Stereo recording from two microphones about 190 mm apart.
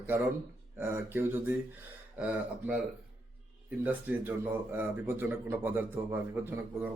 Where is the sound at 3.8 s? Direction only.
10° right (ahead or behind).